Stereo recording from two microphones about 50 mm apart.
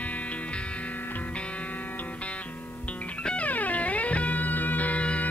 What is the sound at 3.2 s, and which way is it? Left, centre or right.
Music, left.